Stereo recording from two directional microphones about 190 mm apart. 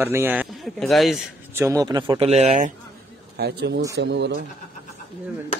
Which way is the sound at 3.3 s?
60° right (ahead or behind).